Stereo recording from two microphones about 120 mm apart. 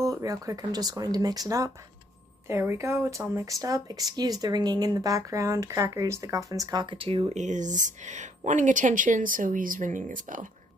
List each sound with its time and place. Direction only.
0.0 s speech: 30° right (ahead or behind)
7.0 s speech: 50° right (ahead or behind)
7.3 s speech: 90° right